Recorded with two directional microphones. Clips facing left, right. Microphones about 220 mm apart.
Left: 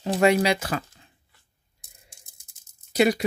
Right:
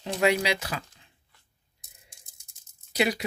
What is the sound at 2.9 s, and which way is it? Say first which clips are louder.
Speech: left 6 dB; 45° left (ahead or behind).